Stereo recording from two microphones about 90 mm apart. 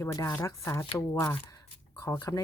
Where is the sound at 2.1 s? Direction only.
45° left (ahead or behind).